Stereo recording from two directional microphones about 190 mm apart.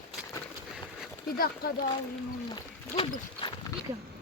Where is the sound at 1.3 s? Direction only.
50° left (ahead or behind).